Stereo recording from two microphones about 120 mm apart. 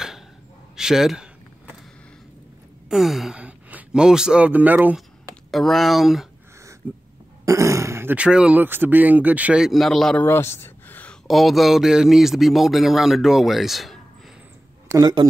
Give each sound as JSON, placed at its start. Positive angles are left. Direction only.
{"t": 0.7, "sound": "speech", "side_deg": -5}
{"t": 2.9, "sound": "speech", "side_deg": 0}
{"t": 5.5, "sound": "speech", "side_deg": 0}
{"t": 6.8, "sound": "speech", "side_deg": -15}
{"t": 10.2, "sound": "a sound", "side_deg": 20}
{"t": 11.2, "sound": "speech", "side_deg": 0}
{"t": 14.9, "sound": "speech", "side_deg": -35}